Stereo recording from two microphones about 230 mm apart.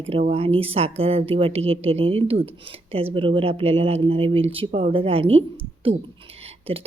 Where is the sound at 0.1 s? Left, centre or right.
Right.